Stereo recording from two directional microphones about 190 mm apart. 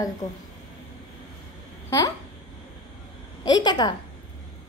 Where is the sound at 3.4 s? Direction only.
20° left (ahead or behind).